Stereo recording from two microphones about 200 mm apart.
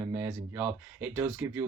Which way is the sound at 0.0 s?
10° right (ahead or behind).